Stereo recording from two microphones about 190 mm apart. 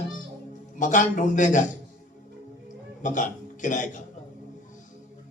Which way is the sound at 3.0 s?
40° left (ahead or behind).